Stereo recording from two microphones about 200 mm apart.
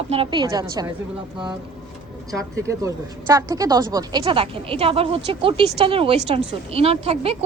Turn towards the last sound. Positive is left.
turn(degrees=-30)  # may be behind; listen again after turning